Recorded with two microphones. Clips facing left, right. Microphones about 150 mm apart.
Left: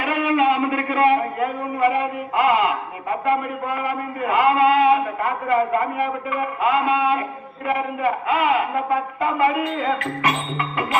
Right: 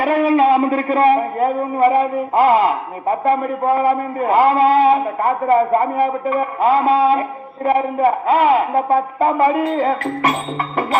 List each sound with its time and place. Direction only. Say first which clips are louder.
0.0 s a man's voice: right 5 dB; 35° right (ahead or behind)